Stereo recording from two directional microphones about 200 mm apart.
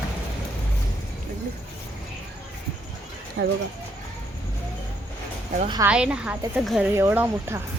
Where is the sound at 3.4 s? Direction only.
55° right (ahead or behind).